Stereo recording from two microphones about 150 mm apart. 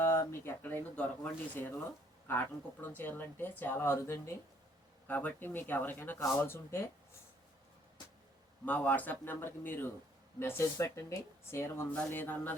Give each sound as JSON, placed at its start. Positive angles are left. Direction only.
{"t": 0.0, "sound": "speech", "side_deg": 15}
{"t": 2.8, "sound": "speech", "side_deg": 15}
{"t": 8.6, "sound": "speech", "side_deg": 10}